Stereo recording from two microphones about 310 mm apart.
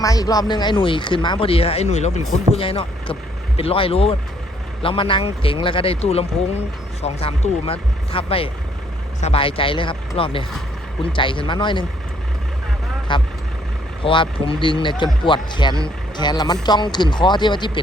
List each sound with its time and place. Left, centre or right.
0.0 s speech: centre
13.1 s speech: centre